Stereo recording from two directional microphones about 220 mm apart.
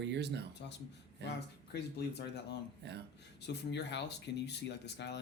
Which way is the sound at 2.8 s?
50° right (ahead or behind).